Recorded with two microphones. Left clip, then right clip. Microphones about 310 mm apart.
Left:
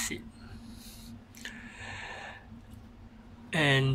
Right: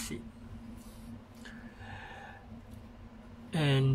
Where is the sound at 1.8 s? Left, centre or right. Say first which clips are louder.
Left 6 dB; left.